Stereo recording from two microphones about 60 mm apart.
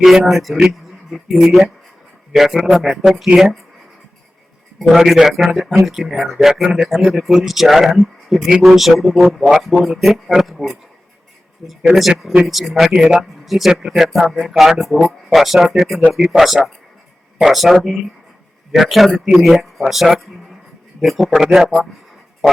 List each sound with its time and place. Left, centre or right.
0.0 s speech: centre
4.8 s a man's voice: centre
12.9 s a man's voice: centre
13.4 s speech: centre